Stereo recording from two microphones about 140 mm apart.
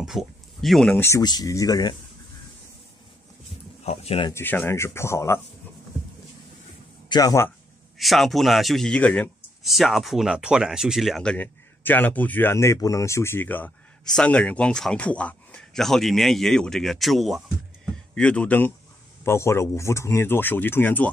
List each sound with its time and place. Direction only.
0.0 s speech: centre (ahead or behind)
0.9 s speech: 20° left (ahead or behind)
1.2 s speech: 30° left (ahead or behind)
3.8 s speech: 45° left (ahead or behind)
4.3 s speech: 15° left (ahead or behind)
7.1 s speech: 25° left (ahead or behind)
8.0 s speech: centre (ahead or behind)
9.6 s speech: centre (ahead or behind)